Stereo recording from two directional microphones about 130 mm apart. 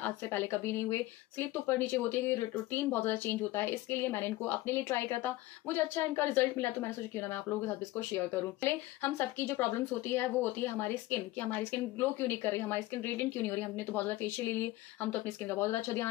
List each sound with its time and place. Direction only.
0.0 s speech: 15° left (ahead or behind)